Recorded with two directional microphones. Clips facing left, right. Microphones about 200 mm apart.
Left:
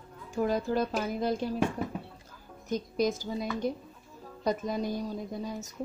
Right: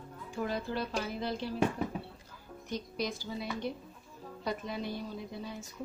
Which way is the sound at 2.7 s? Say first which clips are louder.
Left 7 dB; 45° left (ahead or behind).